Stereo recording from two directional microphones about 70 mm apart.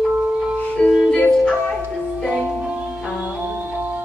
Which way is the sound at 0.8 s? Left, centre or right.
Centre.